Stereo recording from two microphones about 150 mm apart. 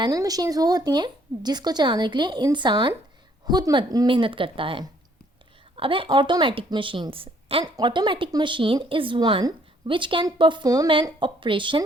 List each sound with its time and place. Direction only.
0.0 s speech: 25° right (ahead or behind)